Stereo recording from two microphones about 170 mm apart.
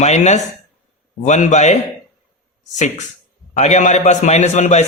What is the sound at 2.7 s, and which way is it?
Speech, 45° left (ahead or behind).